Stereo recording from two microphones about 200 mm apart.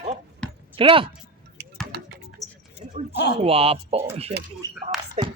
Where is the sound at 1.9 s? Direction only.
55° right (ahead or behind).